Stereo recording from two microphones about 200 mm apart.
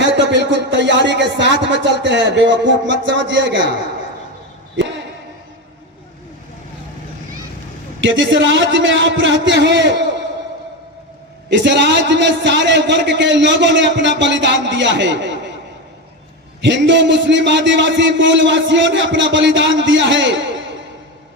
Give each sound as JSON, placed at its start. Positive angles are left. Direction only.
{"t": 0.0, "sound": "speech", "side_deg": -60}
{"t": 8.0, "sound": "a man's voice", "side_deg": -70}
{"t": 11.4, "sound": "a man's voice", "side_deg": -60}
{"t": 16.6, "sound": "a man's voice", "side_deg": -60}